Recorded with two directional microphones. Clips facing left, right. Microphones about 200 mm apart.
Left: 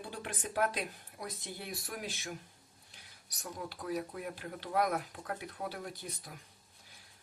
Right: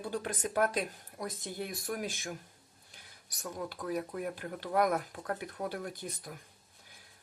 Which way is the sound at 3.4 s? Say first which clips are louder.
Right 3 dB; 50° right (ahead or behind).